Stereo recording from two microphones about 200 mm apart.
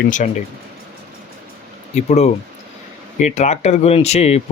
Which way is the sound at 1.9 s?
35° left (ahead or behind).